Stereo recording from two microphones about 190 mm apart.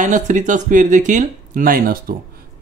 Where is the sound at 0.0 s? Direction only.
40° right (ahead or behind).